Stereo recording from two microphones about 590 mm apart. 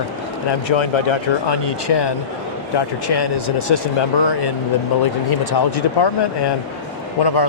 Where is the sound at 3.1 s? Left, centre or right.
Left.